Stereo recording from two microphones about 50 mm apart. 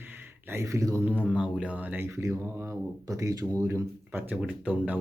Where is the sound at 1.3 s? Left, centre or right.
Right.